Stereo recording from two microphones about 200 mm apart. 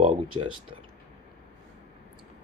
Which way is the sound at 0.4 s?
25° right (ahead or behind).